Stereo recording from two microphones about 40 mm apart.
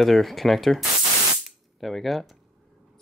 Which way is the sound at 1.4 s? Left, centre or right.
Centre.